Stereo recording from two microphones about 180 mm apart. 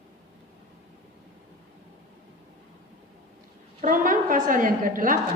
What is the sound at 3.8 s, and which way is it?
A woman's voice, 45° right (ahead or behind).